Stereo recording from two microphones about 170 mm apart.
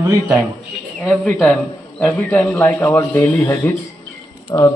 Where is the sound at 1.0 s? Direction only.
5° left (ahead or behind); by 4.7 s 25° left (ahead or behind).